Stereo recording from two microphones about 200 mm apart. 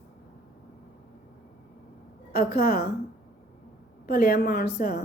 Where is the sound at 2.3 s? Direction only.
50° left (ahead or behind).